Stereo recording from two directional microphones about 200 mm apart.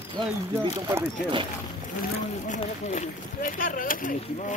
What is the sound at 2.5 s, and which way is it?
Speech, 35° left (ahead or behind).